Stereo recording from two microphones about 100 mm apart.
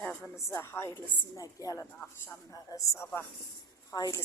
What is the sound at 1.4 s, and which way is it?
A woman's voice, 35° left (ahead or behind).